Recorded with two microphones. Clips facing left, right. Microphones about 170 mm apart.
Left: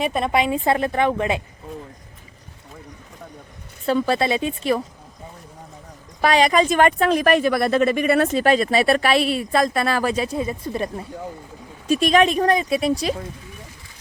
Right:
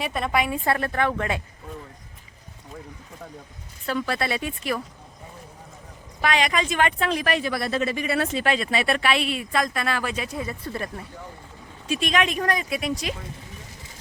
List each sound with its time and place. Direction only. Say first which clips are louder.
0.0 s a woman's voice: left 4 dB; 20° left (ahead or behind)
3.8 s a woman's voice: left 7 dB; 30° left (ahead or behind)
6.2 s speech: left 7 dB; 35° left (ahead or behind)
10.3 s a woman's voice: left 6 dB; 20° left (ahead or behind)
11.9 s speech: left 7 dB; 40° left (ahead or behind)